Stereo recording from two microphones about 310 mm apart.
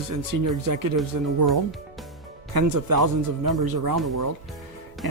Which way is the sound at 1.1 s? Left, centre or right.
Right.